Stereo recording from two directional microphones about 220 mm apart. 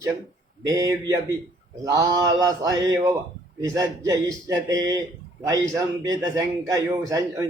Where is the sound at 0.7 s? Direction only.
15° right (ahead or behind).